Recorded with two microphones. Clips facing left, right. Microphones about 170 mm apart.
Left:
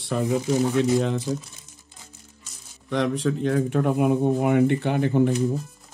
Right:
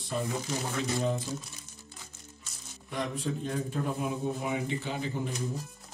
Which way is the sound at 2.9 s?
85° left.